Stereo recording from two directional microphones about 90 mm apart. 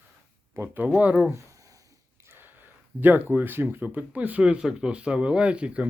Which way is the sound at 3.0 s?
20° right (ahead or behind).